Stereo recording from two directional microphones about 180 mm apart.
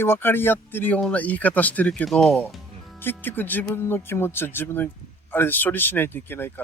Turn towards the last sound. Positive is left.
turn(degrees=10)  # may be behind; listen again after turning